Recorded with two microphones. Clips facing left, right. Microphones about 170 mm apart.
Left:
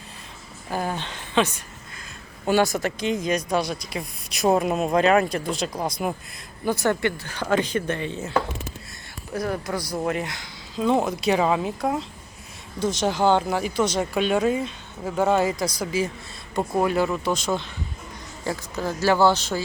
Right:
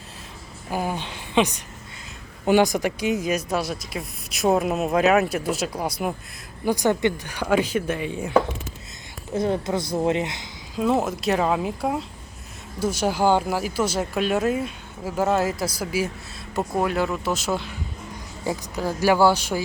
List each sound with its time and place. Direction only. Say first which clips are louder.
0.7 s speech: right 1 dB; 10° right (ahead or behind)
9.3 s speech: right 4 dB; 25° right (ahead or behind)
10.8 s speech: even; 5° right (ahead or behind)